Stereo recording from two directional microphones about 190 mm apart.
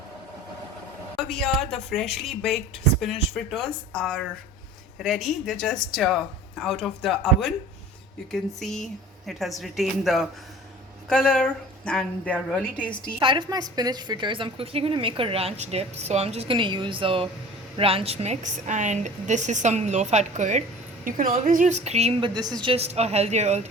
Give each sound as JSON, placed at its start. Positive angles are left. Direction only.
{"t": 1.3, "sound": "a woman's voice", "side_deg": 0}
{"t": 13.1, "sound": "a woman's voice", "side_deg": -20}